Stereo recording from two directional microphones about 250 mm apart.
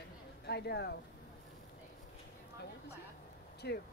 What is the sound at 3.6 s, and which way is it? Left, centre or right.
Speech, left.